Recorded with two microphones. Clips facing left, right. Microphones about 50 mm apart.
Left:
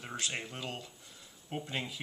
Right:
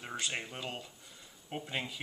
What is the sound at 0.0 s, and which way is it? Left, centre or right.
Speech, centre.